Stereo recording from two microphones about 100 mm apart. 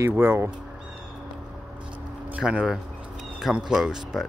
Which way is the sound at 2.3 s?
10° right (ahead or behind).